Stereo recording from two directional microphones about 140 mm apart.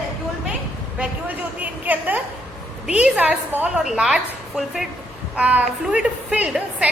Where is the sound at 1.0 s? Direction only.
10° right (ahead or behind).